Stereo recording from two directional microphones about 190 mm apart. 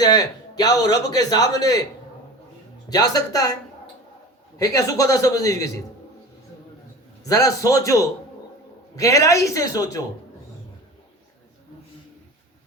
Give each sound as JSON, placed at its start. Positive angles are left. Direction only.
{"t": 0.0, "sound": "a man's voice", "side_deg": 20}
{"t": 2.9, "sound": "a man's voice", "side_deg": 20}
{"t": 4.5, "sound": "a man's voice", "side_deg": 20}
{"t": 7.3, "sound": "a man's voice", "side_deg": 20}